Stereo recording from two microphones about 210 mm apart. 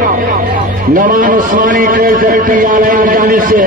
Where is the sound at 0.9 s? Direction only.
40° right (ahead or behind).